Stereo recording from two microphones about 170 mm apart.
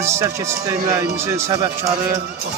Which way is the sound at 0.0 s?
15° right (ahead or behind).